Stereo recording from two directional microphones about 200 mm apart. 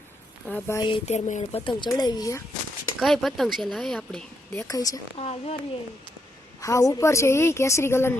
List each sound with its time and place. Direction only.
0.4 s a woman's voice: 10° left (ahead or behind)
0.8 s speech: 25° left (ahead or behind)
3.0 s speech: centre (ahead or behind)
4.7 s speech: 20° left (ahead or behind)
5.1 s a woman's voice: 30° left (ahead or behind)
6.6 s a woman's voice: 15° left (ahead or behind)